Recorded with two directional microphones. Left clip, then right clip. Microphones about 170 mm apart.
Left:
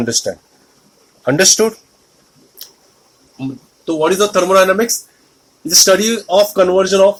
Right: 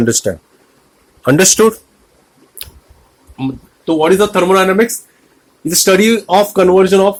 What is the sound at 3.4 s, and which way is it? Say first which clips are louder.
Speech: right 4 dB; 35° right (ahead or behind).